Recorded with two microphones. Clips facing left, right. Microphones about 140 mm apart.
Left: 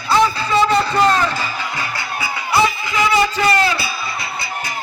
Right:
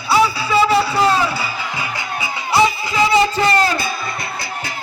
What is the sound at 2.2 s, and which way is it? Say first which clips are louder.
Music: right 1 dB; 25° right (ahead or behind).